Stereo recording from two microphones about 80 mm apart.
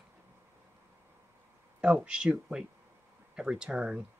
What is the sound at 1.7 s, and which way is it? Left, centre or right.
Speech, centre.